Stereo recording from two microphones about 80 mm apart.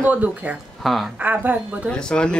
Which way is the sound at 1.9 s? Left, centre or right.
Centre.